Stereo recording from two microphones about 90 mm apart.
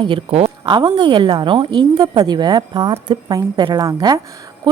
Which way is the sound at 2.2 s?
50° right (ahead or behind).